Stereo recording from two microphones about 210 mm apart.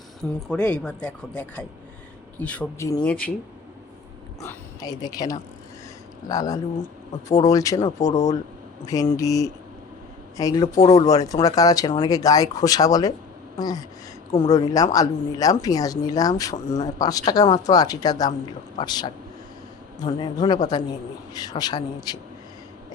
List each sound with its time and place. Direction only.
0.5 s speech: 5° left (ahead or behind)
2.4 s speech: 5° left (ahead or behind)
4.4 s speech: 20° left (ahead or behind)
10.8 s speech: 30° left (ahead or behind)
11.1 s a man's voice: 15° left (ahead or behind)